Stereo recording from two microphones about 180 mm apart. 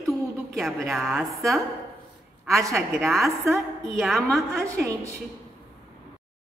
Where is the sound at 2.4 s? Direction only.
15° right (ahead or behind).